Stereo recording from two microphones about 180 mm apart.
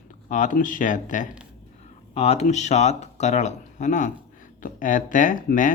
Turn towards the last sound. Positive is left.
turn(degrees=45)  # may be behind; listen again after turning